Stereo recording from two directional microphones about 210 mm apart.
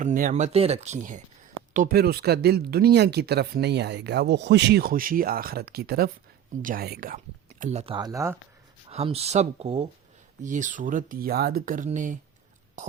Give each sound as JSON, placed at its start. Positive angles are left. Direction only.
{"t": 0.0, "sound": "speech", "side_deg": -40}
{"t": 7.6, "sound": "speech", "side_deg": -30}
{"t": 8.9, "sound": "speech", "side_deg": -30}